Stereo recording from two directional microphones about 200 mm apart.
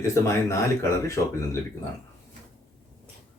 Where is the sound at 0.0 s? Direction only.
15° left (ahead or behind).